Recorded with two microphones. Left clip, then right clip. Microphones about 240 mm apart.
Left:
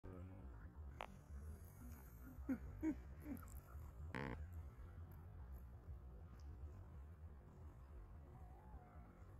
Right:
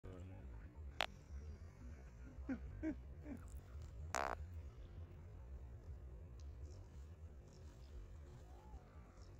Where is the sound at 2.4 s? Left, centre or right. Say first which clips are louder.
Left 1 dB; left.